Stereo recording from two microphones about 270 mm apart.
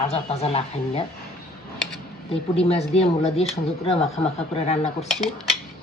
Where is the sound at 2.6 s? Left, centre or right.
Left.